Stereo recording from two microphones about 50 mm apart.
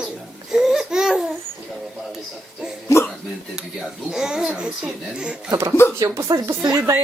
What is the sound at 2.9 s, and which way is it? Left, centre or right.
Hiccup, left.